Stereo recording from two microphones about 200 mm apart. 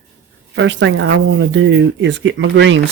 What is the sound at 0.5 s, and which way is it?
Speech, 65° right (ahead or behind).